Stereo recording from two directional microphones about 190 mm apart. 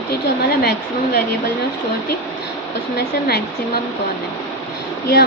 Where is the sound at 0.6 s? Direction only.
55° left (ahead or behind).